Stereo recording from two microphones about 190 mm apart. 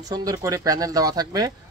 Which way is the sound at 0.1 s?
20° right (ahead or behind).